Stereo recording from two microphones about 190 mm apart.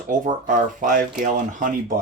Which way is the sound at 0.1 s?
45° right (ahead or behind).